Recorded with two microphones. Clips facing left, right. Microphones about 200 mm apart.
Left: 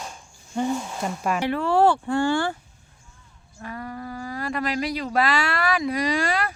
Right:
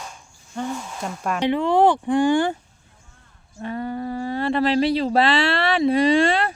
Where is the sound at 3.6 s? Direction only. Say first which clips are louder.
Right 7 dB; 25° right (ahead or behind).